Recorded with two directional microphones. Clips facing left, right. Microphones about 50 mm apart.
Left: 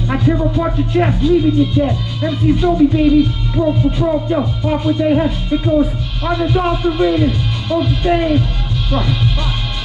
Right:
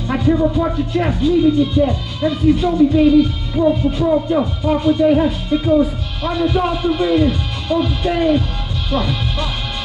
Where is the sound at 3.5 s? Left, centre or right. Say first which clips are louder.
Right 1 dB; centre.